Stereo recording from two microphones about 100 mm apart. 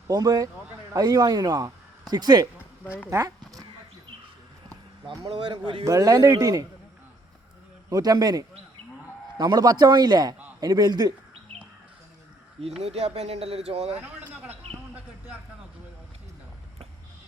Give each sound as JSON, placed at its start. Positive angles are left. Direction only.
{"t": 0.1, "sound": "a man's voice", "side_deg": -40}
{"t": 3.1, "sound": "a sound", "side_deg": -35}
{"t": 5.4, "sound": "speech", "side_deg": -55}
{"t": 5.8, "sound": "a man's voice", "side_deg": -35}
{"t": 7.9, "sound": "a man's voice", "side_deg": -40}
{"t": 12.6, "sound": "speech", "side_deg": -90}
{"t": 13.9, "sound": "speech", "side_deg": -20}